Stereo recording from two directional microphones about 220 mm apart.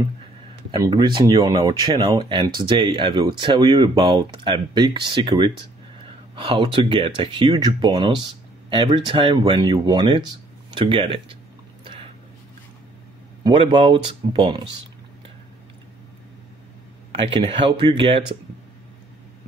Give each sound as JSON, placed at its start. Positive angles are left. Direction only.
{"t": 0.7, "sound": "speech", "side_deg": -20}
{"t": 13.4, "sound": "speech", "side_deg": -20}
{"t": 17.1, "sound": "speech", "side_deg": -25}